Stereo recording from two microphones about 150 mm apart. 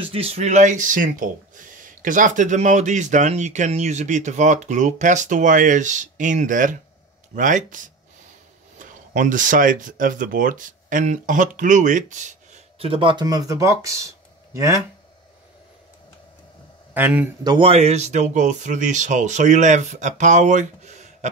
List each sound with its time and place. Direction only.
0.0 s speech: 40° right (ahead or behind); by 12.6 s 55° right (ahead or behind)
12.7 s speech: 35° right (ahead or behind); by 14.8 s 20° right (ahead or behind)
16.9 s speech: 10° right (ahead or behind)
17.4 s speech: 30° right (ahead or behind); by 21.3 s 50° right (ahead or behind)